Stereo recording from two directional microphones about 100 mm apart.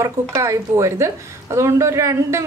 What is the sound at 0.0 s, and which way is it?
A woman's voice, 30° right (ahead or behind).